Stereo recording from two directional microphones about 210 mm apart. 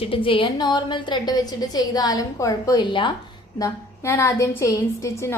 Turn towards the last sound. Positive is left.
turn(degrees=15)  # may be behind; listen again after turning